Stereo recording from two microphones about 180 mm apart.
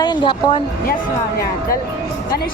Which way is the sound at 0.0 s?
25° left (ahead or behind).